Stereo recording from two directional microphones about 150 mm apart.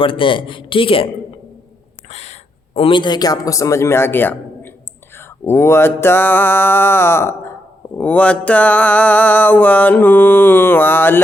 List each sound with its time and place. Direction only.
0.0 s speech: 35° left (ahead or behind)
2.0 s speech: 45° left (ahead or behind); by 4.7 s 15° left (ahead or behind)
5.1 s mantra: 15° left (ahead or behind)